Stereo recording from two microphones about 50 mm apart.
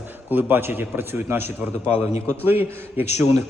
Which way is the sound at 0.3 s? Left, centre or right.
Right.